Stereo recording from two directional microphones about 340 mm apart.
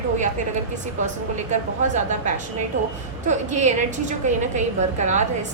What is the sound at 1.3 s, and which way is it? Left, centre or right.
A woman's voice, right.